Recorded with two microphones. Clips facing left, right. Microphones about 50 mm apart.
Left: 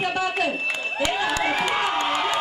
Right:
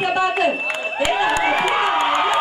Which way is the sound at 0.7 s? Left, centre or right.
Right.